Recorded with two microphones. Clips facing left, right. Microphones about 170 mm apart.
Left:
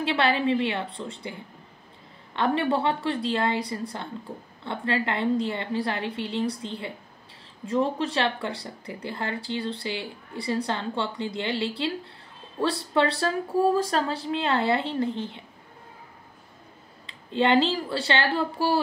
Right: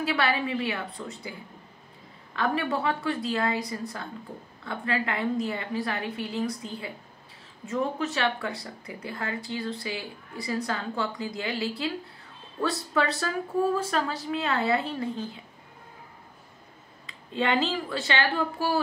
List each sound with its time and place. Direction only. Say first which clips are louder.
0.0 s speech: left 3 dB; 30° left (ahead or behind)
2.3 s speech: left 3 dB; 30° left (ahead or behind)
17.0 s speech: left 4 dB; 30° left (ahead or behind)